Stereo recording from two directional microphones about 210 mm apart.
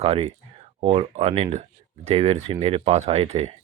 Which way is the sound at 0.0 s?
25° right (ahead or behind).